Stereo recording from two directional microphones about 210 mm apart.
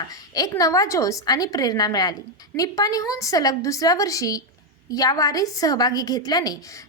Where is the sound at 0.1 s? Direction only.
15° left (ahead or behind).